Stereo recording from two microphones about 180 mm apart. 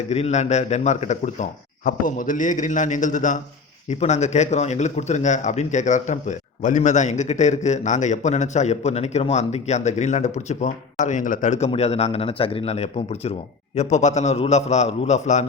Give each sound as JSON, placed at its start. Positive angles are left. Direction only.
{"t": 0.1, "sound": "a man's voice", "side_deg": 40}